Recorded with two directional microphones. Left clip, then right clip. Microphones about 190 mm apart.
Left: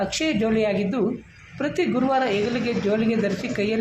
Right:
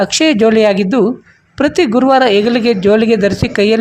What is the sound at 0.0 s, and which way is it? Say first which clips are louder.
A man's voice: right 13 dB; 50° right (ahead or behind).